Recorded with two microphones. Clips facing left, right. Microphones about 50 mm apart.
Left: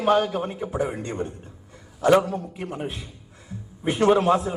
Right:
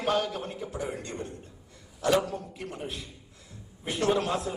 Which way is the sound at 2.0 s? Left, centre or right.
Left.